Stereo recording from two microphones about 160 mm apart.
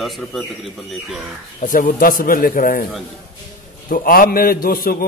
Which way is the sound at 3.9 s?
60° left (ahead or behind).